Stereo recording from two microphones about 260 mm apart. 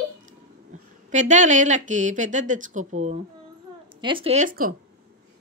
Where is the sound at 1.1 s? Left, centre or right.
Right.